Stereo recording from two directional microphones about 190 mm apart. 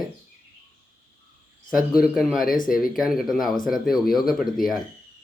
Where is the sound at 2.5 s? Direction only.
45° left (ahead or behind).